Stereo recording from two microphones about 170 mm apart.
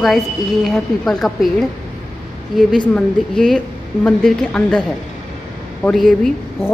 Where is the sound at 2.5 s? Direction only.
5° left (ahead or behind).